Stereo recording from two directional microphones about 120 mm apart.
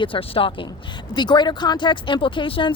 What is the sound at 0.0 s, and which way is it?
Speech, 50° left (ahead or behind).